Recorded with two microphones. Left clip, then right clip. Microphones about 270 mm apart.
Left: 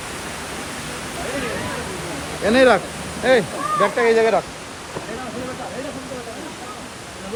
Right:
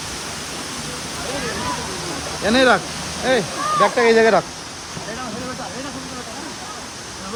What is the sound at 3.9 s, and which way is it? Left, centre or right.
Speech, right.